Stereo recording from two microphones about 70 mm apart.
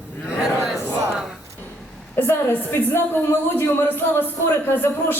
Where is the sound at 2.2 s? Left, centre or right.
Left.